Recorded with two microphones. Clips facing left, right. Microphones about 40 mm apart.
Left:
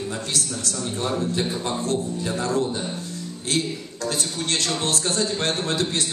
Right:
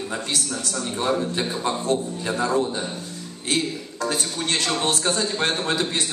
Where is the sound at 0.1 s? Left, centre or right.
Right.